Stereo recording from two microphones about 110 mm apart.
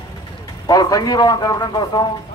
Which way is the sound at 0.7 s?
35° left (ahead or behind).